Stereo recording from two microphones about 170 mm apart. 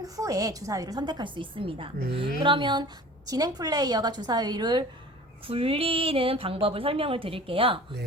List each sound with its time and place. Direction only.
0.0 s a woman's voice: 20° right (ahead or behind)